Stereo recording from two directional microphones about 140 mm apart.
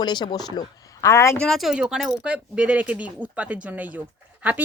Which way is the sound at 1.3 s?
5° left (ahead or behind).